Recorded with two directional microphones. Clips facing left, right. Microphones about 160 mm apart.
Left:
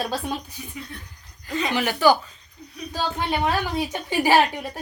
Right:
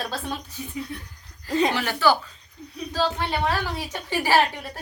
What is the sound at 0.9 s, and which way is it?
Speech, 10° right (ahead or behind).